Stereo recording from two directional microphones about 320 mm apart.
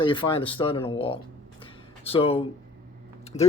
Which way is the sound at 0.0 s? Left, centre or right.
Centre.